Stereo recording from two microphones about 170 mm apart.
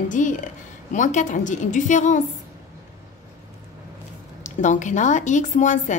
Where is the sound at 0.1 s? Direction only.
50° left (ahead or behind).